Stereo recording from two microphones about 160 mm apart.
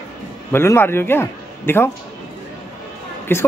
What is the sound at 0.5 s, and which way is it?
A man's voice, 15° left (ahead or behind).